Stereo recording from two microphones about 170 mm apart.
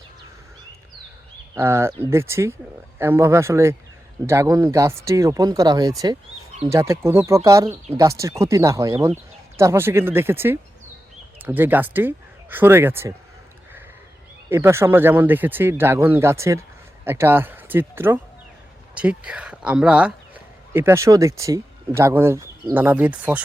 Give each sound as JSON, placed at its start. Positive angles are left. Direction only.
{"t": 1.5, "sound": "speech", "side_deg": -15}
{"t": 14.5, "sound": "speech", "side_deg": -15}